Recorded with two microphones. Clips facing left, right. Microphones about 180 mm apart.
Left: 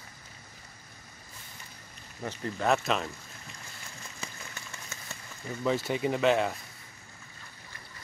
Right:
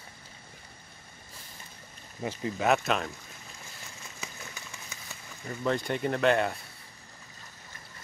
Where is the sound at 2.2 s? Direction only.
10° right (ahead or behind).